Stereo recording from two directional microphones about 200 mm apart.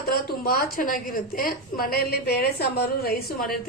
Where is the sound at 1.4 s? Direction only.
45° left (ahead or behind).